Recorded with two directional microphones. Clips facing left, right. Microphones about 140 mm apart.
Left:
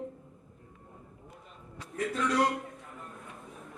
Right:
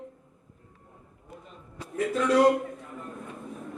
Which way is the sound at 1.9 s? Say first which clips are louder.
Right 6 dB; 25° right (ahead or behind).